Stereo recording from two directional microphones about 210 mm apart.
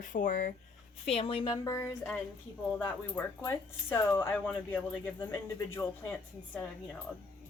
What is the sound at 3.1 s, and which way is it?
Speech, 10° left (ahead or behind).